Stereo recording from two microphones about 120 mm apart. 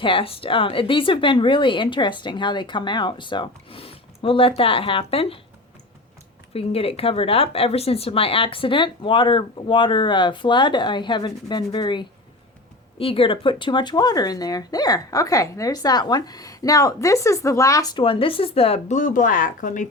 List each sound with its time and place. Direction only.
0.0 s speech: 45° left (ahead or behind)
6.5 s speech: 55° left (ahead or behind)
13.0 s speech: 50° left (ahead or behind); by 17.9 s 25° left (ahead or behind)
17.9 s speech: 50° left (ahead or behind)
18.9 s speech: 90° left